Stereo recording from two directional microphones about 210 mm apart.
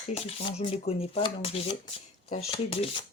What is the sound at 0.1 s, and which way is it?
Speech, 30° left (ahead or behind).